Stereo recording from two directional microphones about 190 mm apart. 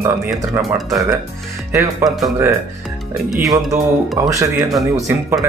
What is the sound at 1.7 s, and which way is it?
Music, 15° right (ahead or behind).